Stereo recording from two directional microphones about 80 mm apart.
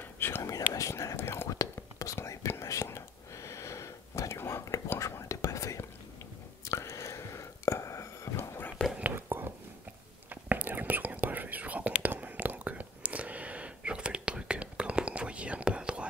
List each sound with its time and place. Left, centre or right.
0.0 s whispering: left
0.4 s whispering: left
9.1 s a sound: right
10.3 s whispering: right